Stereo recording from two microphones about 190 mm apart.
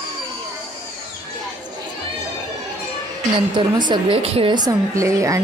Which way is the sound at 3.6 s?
25° right (ahead or behind).